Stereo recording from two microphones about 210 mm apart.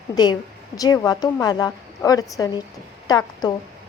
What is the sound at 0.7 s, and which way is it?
A woman's voice, 15° left (ahead or behind).